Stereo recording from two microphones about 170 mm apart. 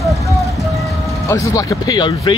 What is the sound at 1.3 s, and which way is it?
Speech, 20° left (ahead or behind).